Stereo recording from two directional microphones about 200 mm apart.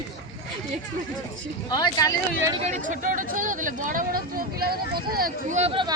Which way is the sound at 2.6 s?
40° right (ahead or behind).